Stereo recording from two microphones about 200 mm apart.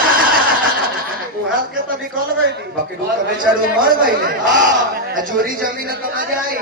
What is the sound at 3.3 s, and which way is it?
A man's voice, 45° right (ahead or behind).